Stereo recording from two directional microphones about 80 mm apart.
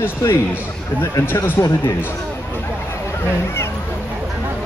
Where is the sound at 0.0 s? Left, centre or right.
Left.